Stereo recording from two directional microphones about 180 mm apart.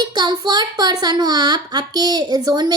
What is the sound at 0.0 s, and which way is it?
A child's voice, 25° right (ahead or behind).